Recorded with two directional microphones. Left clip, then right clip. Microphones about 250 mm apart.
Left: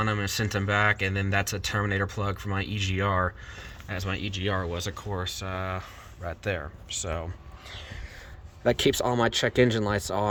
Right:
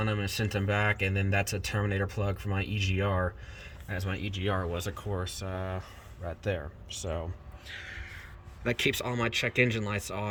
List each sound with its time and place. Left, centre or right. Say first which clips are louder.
0.0 s speech: left 4 dB; centre
8.6 s speech: left 6 dB; centre